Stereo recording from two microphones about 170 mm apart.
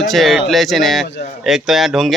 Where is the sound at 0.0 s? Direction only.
Centre (ahead or behind).